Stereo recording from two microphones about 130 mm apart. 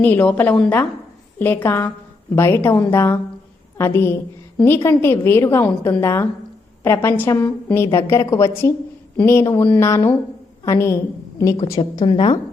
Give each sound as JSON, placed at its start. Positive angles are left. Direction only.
{"t": 0.0, "sound": "a woman's voice", "side_deg": 15}
{"t": 11.8, "sound": "a woman's voice", "side_deg": 40}